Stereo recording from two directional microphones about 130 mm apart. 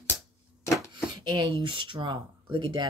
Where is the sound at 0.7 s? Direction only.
30° right (ahead or behind).